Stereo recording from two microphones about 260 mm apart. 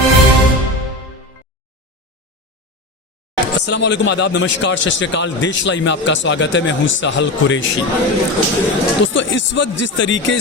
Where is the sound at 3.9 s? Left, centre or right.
Left.